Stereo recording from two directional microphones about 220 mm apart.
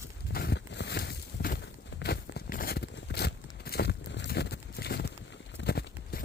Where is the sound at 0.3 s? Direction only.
50° left (ahead or behind).